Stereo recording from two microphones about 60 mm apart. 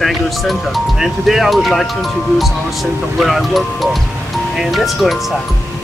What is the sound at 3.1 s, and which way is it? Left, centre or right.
Speech, centre.